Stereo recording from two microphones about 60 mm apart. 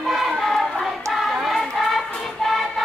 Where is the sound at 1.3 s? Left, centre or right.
Centre.